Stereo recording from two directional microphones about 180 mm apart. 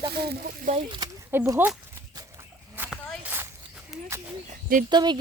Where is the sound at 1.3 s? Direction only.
15° right (ahead or behind).